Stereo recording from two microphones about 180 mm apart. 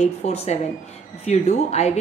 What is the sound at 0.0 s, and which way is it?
Speech, 35° left (ahead or behind).